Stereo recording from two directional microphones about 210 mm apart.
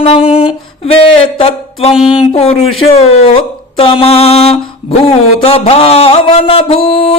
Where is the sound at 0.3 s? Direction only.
25° left (ahead or behind).